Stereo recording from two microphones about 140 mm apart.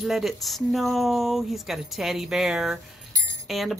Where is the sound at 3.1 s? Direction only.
25° right (ahead or behind).